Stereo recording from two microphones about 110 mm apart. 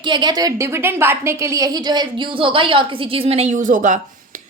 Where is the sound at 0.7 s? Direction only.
20° right (ahead or behind); by 3.6 s 70° right (ahead or behind).